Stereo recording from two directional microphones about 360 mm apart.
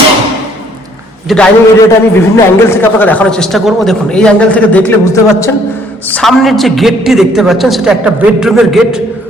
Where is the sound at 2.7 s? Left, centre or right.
Centre.